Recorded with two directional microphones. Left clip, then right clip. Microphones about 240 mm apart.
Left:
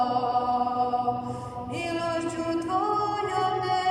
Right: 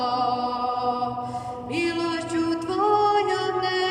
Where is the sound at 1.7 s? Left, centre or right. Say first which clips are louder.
Right 3 dB; right.